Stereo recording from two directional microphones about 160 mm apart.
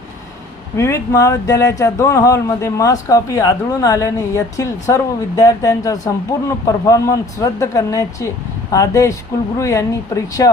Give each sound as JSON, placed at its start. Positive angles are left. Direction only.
{"t": 0.8, "sound": "a man's voice", "side_deg": 20}